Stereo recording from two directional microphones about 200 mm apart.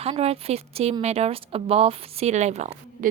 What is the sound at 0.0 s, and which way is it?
A woman's voice, 30° right (ahead or behind).